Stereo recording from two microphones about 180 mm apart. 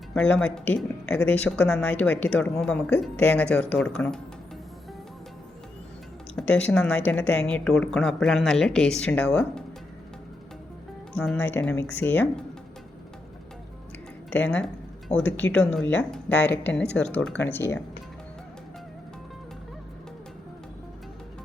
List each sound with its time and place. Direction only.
0.1 s speech: 5° left (ahead or behind)
6.3 s speech: 5° left (ahead or behind)
11.1 s speech: 5° left (ahead or behind)
14.3 s speech: 10° left (ahead or behind)